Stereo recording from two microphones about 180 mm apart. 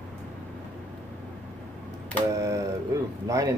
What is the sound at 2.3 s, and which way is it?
Speech, 15° right (ahead or behind).